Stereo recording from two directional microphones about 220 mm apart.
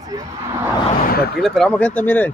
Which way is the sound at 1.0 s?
45° left (ahead or behind).